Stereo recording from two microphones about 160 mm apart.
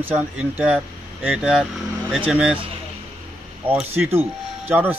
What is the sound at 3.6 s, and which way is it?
Speech, 5° right (ahead or behind).